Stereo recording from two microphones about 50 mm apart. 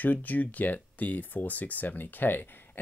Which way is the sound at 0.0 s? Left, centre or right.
Left.